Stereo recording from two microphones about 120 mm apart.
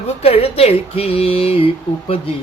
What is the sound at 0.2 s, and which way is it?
Speech, 55° left (ahead or behind).